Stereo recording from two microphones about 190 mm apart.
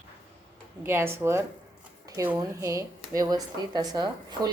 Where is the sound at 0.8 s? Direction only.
10° right (ahead or behind).